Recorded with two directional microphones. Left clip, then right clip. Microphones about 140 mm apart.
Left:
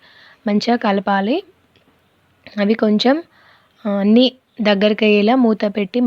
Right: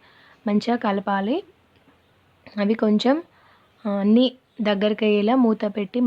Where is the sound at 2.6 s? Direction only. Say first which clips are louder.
Left 5 dB; 20° left (ahead or behind).